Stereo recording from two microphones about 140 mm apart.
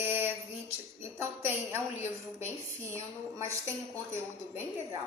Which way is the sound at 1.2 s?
15° right (ahead or behind).